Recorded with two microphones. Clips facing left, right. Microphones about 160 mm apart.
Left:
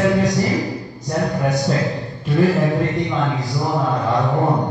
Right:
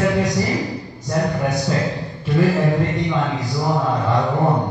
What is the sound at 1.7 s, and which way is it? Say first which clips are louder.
A man's voice: left 1 dB; centre (ahead or behind).